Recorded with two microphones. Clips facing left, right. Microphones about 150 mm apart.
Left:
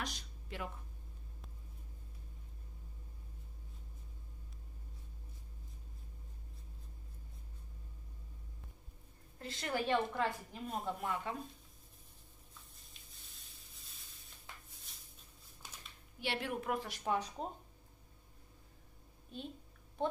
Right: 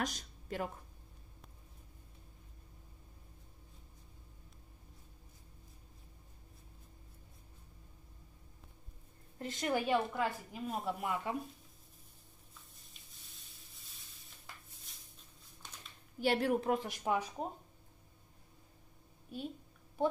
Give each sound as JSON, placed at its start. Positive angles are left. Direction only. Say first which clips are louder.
{"t": 0.0, "sound": "a sound", "louder": "right 6 dB", "side_deg": -45}
{"t": 9.4, "sound": "a woman's voice", "louder": "right 3 dB", "side_deg": -20}
{"t": 15.6, "sound": "a sound", "louder": "even", "side_deg": 5}
{"t": 16.2, "sound": "a woman's voice", "louder": "right 8 dB", "side_deg": -40}
{"t": 16.7, "sound": "a woman's voice", "louder": "right 2 dB", "side_deg": -20}
{"t": 19.3, "sound": "a woman's voice", "louder": "right 4 dB", "side_deg": -5}